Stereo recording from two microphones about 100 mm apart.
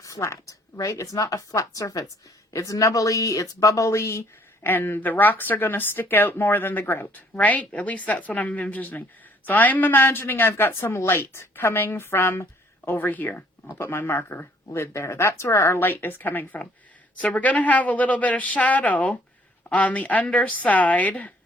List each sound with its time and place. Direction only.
0.0 s a woman's voice: 30° left (ahead or behind); by 21.3 s 15° left (ahead or behind)